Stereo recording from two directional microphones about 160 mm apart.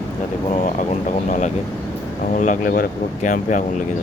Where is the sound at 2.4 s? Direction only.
60° left (ahead or behind).